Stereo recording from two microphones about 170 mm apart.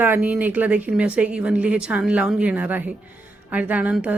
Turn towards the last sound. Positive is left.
turn(degrees=-10)  # may be behind; listen again after turning